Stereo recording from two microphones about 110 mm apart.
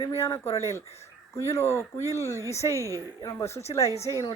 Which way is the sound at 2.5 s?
25° left (ahead or behind).